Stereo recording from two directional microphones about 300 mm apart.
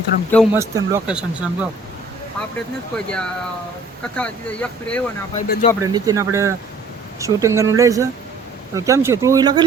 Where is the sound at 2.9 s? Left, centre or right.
Centre.